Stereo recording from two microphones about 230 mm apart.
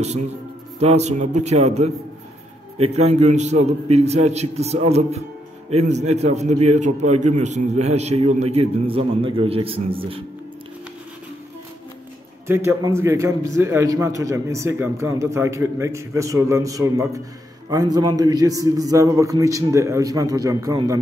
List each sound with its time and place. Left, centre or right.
0.7 s a man's voice: right
12.4 s a man's voice: centre